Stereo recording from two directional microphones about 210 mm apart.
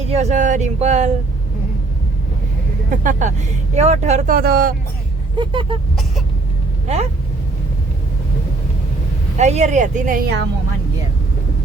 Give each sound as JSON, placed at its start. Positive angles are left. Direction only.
{"t": 0.0, "sound": "speech", "side_deg": -30}
{"t": 2.9, "sound": "speech", "side_deg": -40}
{"t": 5.4, "sound": "vehicle", "side_deg": -25}
{"t": 6.8, "sound": "speech", "side_deg": -30}
{"t": 9.4, "sound": "speech", "side_deg": -35}